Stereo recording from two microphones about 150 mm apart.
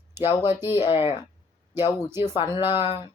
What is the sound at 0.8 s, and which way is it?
Speech, 35° left (ahead or behind).